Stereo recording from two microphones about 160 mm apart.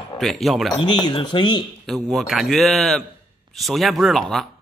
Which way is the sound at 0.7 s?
30° left (ahead or behind).